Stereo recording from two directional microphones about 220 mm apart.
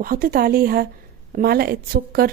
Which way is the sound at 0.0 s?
40° right (ahead or behind).